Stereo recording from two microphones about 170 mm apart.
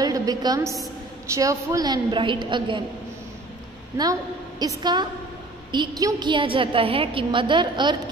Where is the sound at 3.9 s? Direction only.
25° right (ahead or behind).